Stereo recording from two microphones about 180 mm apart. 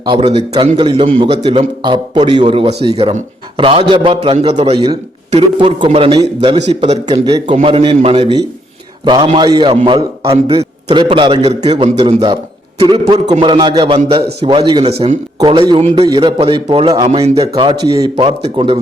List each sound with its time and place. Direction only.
0.0 s a man's voice: 25° right (ahead or behind)
6.6 s a man's voice: 40° right (ahead or behind)
7.1 s a man's voice: 25° right (ahead or behind)
17.3 s a man's voice: 20° right (ahead or behind)